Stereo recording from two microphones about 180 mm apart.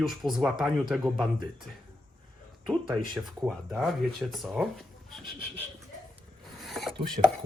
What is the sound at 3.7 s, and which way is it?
Speech, centre (ahead or behind).